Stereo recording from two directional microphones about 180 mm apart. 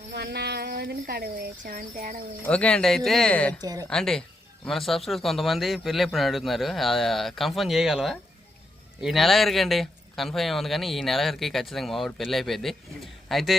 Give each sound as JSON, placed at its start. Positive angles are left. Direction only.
{"t": 0.1, "sound": "speech", "side_deg": -65}
{"t": 2.4, "sound": "a man's voice", "side_deg": 5}
{"t": 3.6, "sound": "a woman's voice", "side_deg": -20}
{"t": 3.8, "sound": "a man's voice", "side_deg": 5}